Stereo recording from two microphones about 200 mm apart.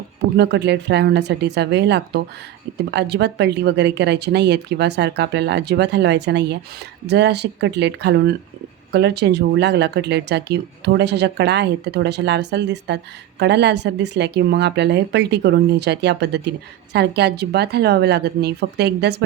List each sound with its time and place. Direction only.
0.3 s speech: 55° right (ahead or behind)